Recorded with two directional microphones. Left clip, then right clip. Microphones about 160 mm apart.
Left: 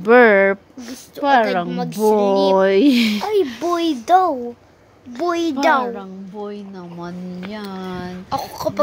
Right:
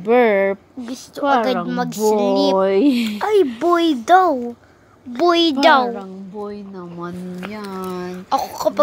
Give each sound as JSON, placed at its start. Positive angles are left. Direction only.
{"t": 0.0, "sound": "speech", "side_deg": 30}
{"t": 1.2, "sound": "a child's voice", "side_deg": -20}
{"t": 1.7, "sound": "a sound", "side_deg": -30}
{"t": 2.5, "sound": "speech", "side_deg": 35}
{"t": 3.2, "sound": "a child's voice", "side_deg": -30}
{"t": 5.9, "sound": "speech", "side_deg": 20}
{"t": 7.5, "sound": "speech", "side_deg": 10}
{"t": 8.3, "sound": "speech", "side_deg": -15}